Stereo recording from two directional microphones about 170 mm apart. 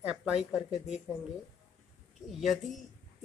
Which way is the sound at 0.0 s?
5° right (ahead or behind).